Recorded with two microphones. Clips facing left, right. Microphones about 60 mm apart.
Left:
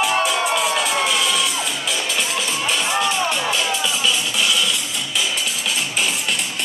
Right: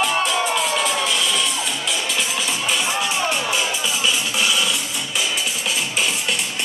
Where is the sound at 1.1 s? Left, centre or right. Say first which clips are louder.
Left 2 dB; centre.